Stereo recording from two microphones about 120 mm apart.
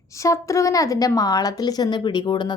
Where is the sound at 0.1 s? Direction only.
25° left (ahead or behind).